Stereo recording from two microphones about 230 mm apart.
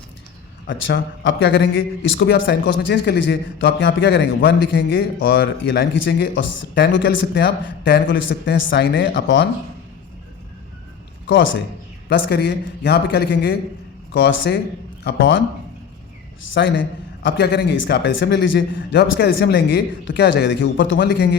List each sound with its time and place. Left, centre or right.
0.7 s a man's voice: left
11.3 s a man's voice: left
16.6 s a man's voice: left